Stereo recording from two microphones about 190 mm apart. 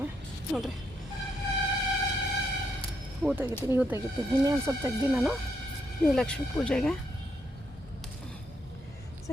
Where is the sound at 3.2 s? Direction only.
10° right (ahead or behind).